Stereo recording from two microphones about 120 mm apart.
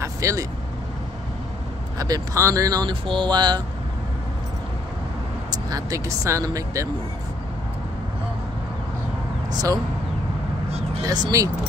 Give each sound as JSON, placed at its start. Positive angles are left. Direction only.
{"t": 0.0, "sound": "vehicle", "side_deg": -25}
{"t": 2.0, "sound": "speech", "side_deg": -30}
{"t": 5.7, "sound": "speech", "side_deg": -30}
{"t": 9.5, "sound": "speech", "side_deg": -30}
{"t": 11.0, "sound": "speech", "side_deg": -30}